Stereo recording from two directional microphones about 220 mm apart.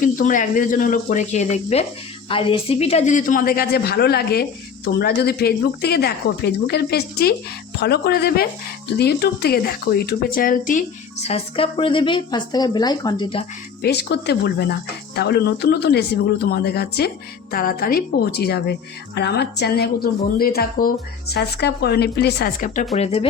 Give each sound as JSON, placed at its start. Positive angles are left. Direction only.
{"t": 0.0, "sound": "a woman's voice", "side_deg": 35}
{"t": 13.8, "sound": "a woman's voice", "side_deg": 50}